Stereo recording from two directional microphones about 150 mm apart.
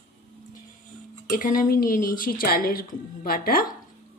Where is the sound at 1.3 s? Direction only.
65° left (ahead or behind).